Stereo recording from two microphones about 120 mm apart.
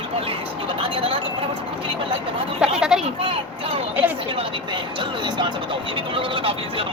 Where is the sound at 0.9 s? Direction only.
45° right (ahead or behind).